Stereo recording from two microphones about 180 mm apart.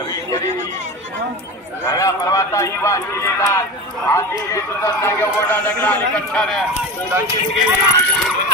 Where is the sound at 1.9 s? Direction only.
20° left (ahead or behind).